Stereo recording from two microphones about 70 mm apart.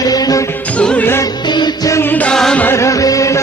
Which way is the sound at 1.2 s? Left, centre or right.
Left.